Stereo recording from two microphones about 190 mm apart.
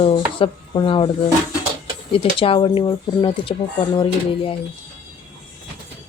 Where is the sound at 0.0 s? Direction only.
30° left (ahead or behind).